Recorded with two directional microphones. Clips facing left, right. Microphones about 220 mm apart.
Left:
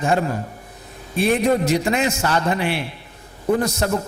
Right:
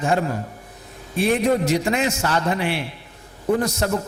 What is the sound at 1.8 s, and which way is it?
A man's voice, 15° left (ahead or behind).